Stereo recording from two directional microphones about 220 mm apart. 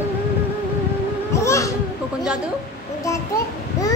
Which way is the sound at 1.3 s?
15° left (ahead or behind).